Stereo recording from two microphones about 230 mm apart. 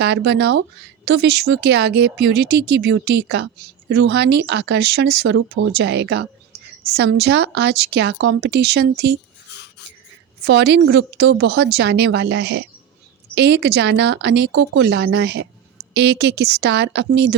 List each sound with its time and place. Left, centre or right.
0.0 s speech: right
10.4 s speech: right